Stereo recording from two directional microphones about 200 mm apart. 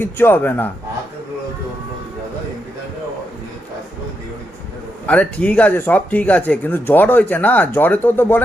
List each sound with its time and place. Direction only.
0.0 s speech: 10° left (ahead or behind)
5.0 s speech: 5° left (ahead or behind)